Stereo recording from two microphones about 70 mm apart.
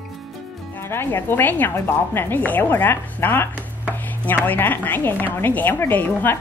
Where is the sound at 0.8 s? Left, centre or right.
Left.